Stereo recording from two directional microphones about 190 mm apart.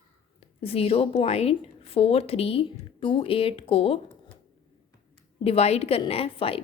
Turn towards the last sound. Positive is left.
turn(degrees=30)  # may be behind; listen again after turning